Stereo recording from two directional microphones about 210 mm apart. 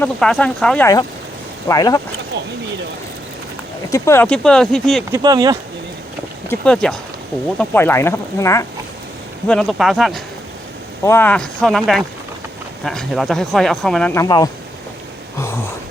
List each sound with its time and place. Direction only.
0.0 s speech: 5° left (ahead or behind)
1.6 s speech: 15° left (ahead or behind)
3.8 s speech: 15° left (ahead or behind)
5.1 s speech: 20° right (ahead or behind)
6.5 s speech: 5° left (ahead or behind)
9.5 s speech: centre (ahead or behind)
11.0 s speech: 10° left (ahead or behind)